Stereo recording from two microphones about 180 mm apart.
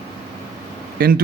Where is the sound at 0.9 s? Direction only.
55° right (ahead or behind).